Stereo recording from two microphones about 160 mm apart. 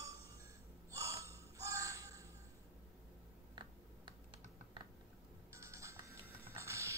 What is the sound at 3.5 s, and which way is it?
Typing, 30° right (ahead or behind).